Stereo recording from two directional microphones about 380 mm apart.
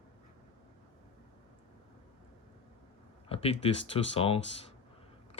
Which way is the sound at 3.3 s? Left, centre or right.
Centre.